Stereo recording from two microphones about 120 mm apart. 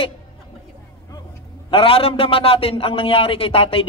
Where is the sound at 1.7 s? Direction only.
50° left (ahead or behind).